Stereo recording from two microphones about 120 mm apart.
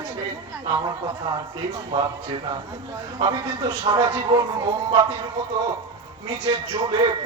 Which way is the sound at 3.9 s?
35° right (ahead or behind).